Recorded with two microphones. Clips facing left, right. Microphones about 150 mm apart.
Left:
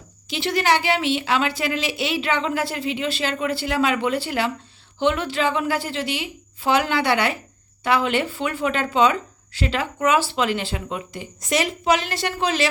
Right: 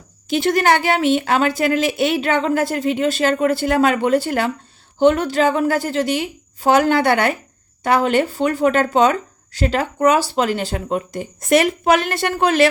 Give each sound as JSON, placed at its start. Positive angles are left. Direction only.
{"t": 0.3, "sound": "speech", "side_deg": -50}